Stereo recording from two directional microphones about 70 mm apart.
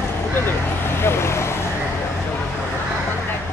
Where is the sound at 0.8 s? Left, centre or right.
Left.